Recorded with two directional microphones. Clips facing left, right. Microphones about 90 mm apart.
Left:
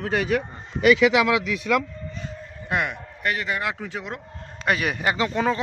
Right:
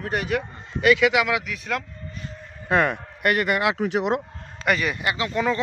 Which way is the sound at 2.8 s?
55° right (ahead or behind).